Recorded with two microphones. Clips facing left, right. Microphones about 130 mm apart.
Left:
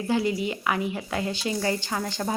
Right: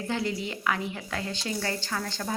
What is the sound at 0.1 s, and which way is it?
A woman's voice, 10° left (ahead or behind).